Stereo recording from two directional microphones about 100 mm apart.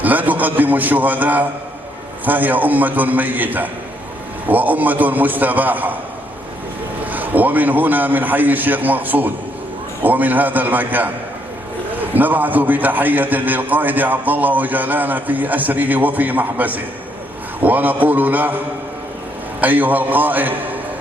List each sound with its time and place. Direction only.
0.0 s a man's voice: 15° right (ahead or behind)
7.0 s a man's voice: 15° right (ahead or behind)
19.6 s a man's voice: 15° right (ahead or behind)